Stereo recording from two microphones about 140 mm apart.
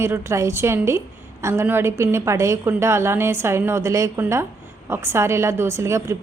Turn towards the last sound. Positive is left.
turn(degrees=-20)  # may be behind; listen again after turning